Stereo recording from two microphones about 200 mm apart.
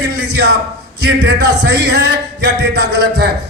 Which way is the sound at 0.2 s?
55° right (ahead or behind).